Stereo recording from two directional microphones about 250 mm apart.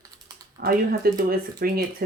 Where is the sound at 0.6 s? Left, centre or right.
Right.